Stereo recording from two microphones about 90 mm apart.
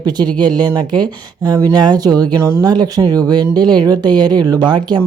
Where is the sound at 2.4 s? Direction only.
25° right (ahead or behind).